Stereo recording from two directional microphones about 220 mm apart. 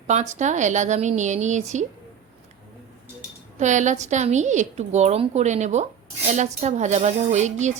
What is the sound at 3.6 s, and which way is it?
A woman's voice, 35° right (ahead or behind).